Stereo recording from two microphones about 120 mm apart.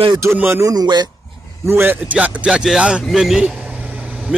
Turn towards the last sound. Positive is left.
turn(degrees=-5)  # may be behind; listen again after turning